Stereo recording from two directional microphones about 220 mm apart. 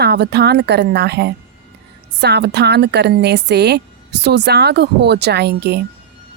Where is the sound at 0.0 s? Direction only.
50° right (ahead or behind).